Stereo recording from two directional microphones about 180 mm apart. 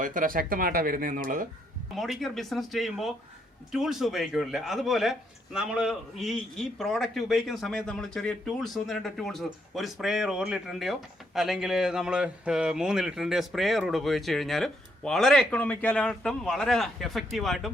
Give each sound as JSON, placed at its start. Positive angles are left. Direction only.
{"t": 0.0, "sound": "speech", "side_deg": -50}
{"t": 2.0, "sound": "speech", "side_deg": 0}